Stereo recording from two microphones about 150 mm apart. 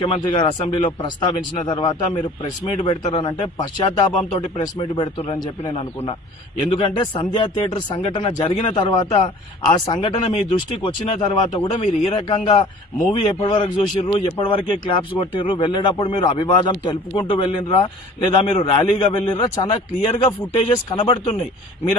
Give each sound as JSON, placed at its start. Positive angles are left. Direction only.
{"t": 0.0, "sound": "speech", "side_deg": 35}
{"t": 4.2, "sound": "speech", "side_deg": 40}
{"t": 11.7, "sound": "speech", "side_deg": 50}
{"t": 12.1, "sound": "speech", "side_deg": 30}
{"t": 12.4, "sound": "a man's voice", "side_deg": 60}
{"t": 13.4, "sound": "speech", "side_deg": 30}